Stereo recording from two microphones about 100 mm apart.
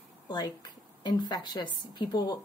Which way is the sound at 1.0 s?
45° left (ahead or behind).